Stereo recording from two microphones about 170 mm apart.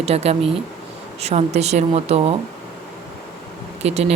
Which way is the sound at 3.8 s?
35° right (ahead or behind).